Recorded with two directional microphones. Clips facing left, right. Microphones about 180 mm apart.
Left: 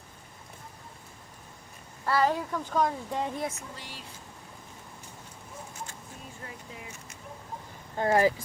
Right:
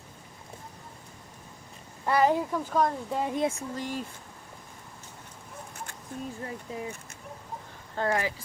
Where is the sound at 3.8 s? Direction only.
45° right (ahead or behind).